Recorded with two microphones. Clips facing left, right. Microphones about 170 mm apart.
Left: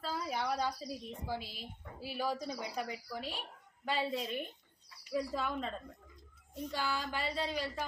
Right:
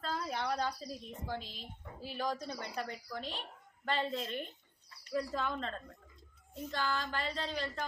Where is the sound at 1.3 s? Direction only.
10° left (ahead or behind).